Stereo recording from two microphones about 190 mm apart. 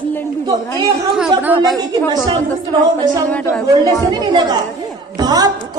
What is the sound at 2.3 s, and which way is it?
Speech, 25° right (ahead or behind).